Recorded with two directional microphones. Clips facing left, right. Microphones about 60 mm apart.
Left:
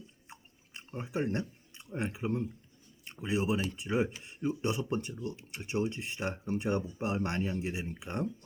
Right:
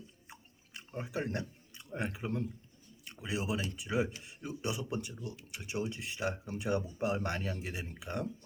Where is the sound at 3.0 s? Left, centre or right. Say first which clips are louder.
Left 5 dB; left.